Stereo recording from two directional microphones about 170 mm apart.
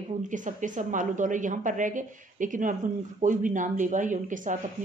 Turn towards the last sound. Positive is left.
turn(degrees=-50)  # may be behind; listen again after turning